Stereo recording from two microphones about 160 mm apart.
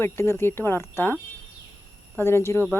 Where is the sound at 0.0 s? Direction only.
15° left (ahead or behind).